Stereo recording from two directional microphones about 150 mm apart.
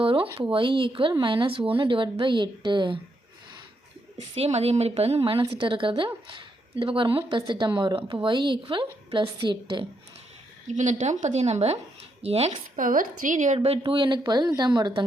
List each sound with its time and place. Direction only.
0.0 s a woman's voice: 35° right (ahead or behind)
4.4 s a woman's voice: 45° right (ahead or behind)
10.7 s a woman's voice: 55° right (ahead or behind)
12.7 s a woman's voice: 65° right (ahead or behind)
13.6 s a woman's voice: 40° right (ahead or behind)